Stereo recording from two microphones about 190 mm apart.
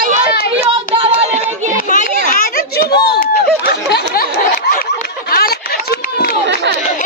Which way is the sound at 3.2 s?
50° left (ahead or behind).